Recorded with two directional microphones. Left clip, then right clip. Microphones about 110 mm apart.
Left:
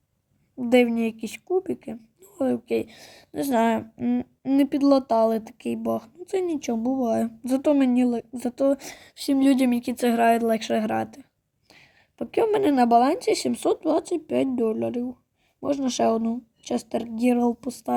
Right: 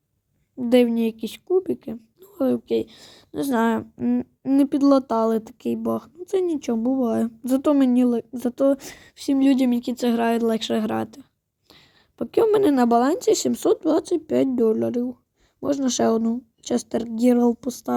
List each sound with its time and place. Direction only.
0.5 s speech: 15° right (ahead or behind)
2.7 s speech: centre (ahead or behind); by 17.9 s 20° right (ahead or behind)